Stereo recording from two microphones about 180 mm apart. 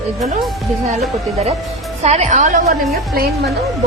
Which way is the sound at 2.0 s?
40° right (ahead or behind).